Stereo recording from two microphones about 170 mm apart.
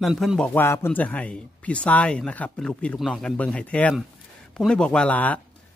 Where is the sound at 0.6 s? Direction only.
15° left (ahead or behind).